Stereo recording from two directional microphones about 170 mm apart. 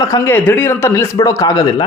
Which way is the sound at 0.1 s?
10° left (ahead or behind).